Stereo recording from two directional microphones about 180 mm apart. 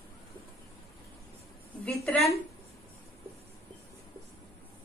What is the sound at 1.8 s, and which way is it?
Speech, 10° left (ahead or behind).